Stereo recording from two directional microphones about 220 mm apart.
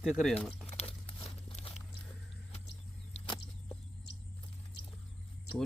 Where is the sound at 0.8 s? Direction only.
25° left (ahead or behind).